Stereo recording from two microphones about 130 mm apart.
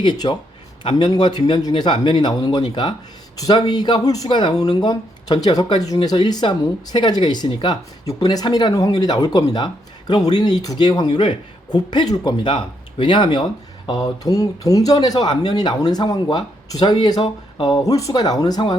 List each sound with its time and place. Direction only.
0.0 s speech: 35° left (ahead or behind)